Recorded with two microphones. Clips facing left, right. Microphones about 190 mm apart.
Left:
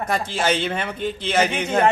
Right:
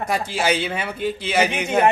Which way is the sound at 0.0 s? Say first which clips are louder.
Even; 10° right (ahead or behind).